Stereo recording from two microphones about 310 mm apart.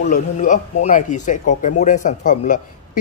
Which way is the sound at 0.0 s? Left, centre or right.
Left.